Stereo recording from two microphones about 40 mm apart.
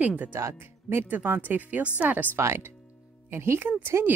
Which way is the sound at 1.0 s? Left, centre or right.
Right.